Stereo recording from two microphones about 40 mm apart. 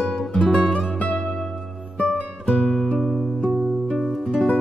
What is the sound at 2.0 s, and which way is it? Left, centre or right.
Music, centre.